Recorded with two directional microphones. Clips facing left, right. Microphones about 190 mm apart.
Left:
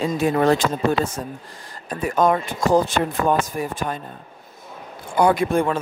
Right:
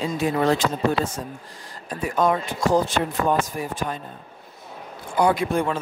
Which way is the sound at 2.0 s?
50° left (ahead or behind).